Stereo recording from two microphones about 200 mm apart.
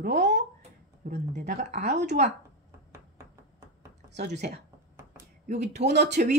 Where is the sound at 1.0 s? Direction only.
50° right (ahead or behind).